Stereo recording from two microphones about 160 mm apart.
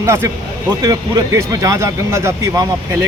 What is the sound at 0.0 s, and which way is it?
Speech, 15° right (ahead or behind).